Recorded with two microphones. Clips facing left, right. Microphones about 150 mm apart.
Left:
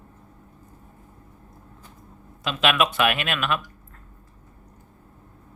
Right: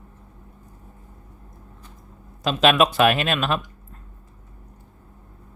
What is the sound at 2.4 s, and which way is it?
Speech, 35° right (ahead or behind).